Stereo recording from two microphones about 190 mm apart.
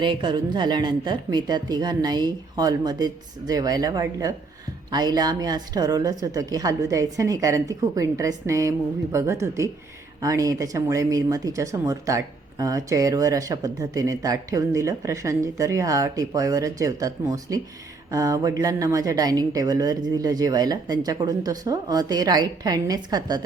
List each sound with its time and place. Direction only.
0.0 s a woman's voice: 25° right (ahead or behind)